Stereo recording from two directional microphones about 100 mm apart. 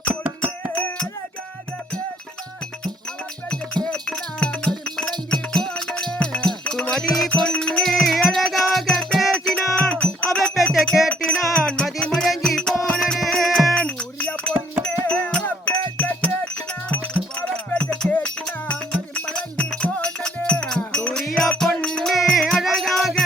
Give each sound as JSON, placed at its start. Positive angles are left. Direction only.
{"t": 0.1, "sound": "music", "side_deg": -20}
{"t": 0.8, "sound": "music", "side_deg": 20}
{"t": 3.8, "sound": "music", "side_deg": 10}
{"t": 17.4, "sound": "music", "side_deg": 15}